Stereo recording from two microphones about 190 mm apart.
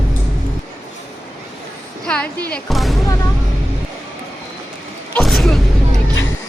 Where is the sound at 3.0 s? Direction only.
15° left (ahead or behind).